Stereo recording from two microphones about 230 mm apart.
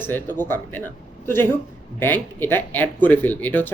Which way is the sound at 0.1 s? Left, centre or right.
Centre.